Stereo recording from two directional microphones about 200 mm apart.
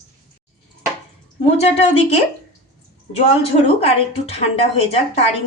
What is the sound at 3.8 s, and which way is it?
Speech, 30° left (ahead or behind).